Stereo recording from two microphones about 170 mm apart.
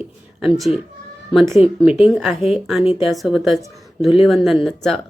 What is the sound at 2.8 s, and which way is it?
Speech, 30° left (ahead or behind).